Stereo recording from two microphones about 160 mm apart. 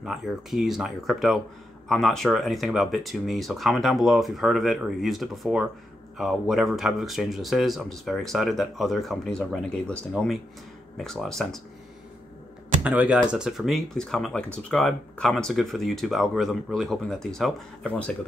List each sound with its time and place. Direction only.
0.0 s speech: centre (ahead or behind)
12.8 s speech: 10° right (ahead or behind); by 18.1 s 5° left (ahead or behind)